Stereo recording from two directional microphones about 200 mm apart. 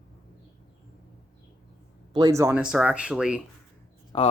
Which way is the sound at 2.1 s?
15° right (ahead or behind).